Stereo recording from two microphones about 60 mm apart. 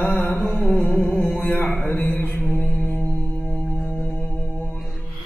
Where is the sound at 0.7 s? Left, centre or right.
Left.